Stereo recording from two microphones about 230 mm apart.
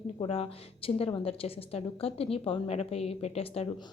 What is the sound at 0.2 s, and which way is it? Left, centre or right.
A woman's voice, left.